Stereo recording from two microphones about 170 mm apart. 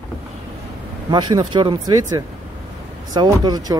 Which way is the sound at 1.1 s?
25° right (ahead or behind).